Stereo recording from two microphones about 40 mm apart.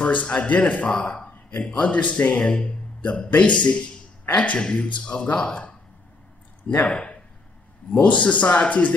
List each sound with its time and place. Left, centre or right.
0.0 s a man's voice: left
0.9 s speech: left
1.7 s a man's voice: left
4.6 s speech: left
6.7 s a man's voice: left